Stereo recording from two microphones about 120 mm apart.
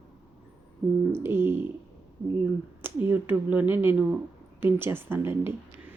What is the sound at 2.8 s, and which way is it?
Speech, 15° right (ahead or behind).